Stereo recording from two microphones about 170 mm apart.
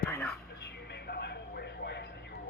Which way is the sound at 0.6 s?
80° left.